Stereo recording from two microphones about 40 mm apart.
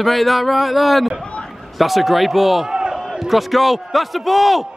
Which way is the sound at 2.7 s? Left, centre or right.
Centre.